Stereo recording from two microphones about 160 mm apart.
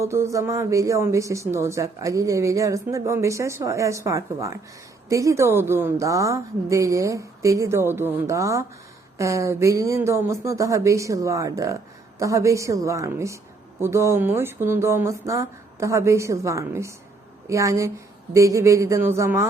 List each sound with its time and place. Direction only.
0.0 s speech: 15° right (ahead or behind)